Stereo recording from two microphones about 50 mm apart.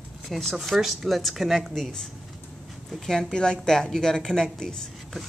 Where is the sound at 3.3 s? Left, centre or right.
Centre.